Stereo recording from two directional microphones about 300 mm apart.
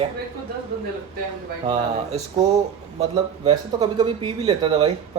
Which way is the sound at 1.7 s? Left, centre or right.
Centre.